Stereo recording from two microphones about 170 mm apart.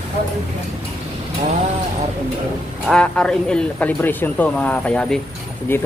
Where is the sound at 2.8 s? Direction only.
5° left (ahead or behind).